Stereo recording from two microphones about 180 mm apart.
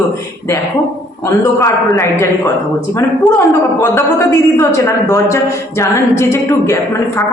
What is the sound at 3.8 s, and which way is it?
A man's voice, 15° left (ahead or behind).